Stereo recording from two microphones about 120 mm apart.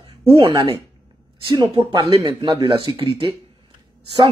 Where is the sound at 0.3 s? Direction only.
50° right (ahead or behind).